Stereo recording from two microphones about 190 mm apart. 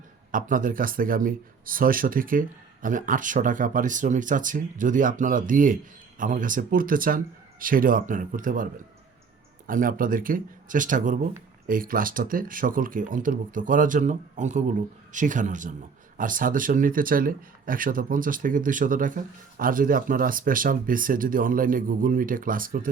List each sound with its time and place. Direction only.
0.3 s speech: 45° right (ahead or behind)
9.6 s speech: 45° right (ahead or behind)